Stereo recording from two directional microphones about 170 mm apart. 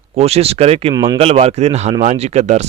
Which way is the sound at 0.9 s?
20° right (ahead or behind).